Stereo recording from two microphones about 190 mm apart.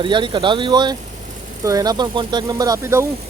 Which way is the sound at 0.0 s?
25° right (ahead or behind).